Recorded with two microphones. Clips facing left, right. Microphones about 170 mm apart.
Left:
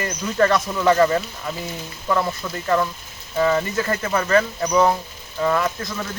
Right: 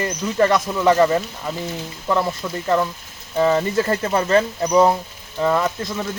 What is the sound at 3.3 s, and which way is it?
Speech, 30° right (ahead or behind).